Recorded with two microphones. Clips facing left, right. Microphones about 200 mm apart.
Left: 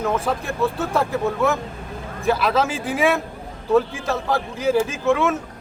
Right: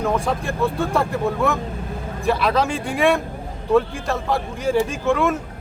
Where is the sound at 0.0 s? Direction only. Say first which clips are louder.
Right 1 dB; centre (ahead or behind).